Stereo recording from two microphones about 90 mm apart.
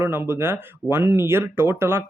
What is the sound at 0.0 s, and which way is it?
Speech, 25° right (ahead or behind).